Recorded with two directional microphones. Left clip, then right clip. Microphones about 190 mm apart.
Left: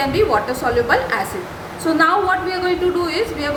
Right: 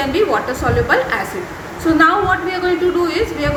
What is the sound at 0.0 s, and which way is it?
A woman's voice, 5° left (ahead or behind).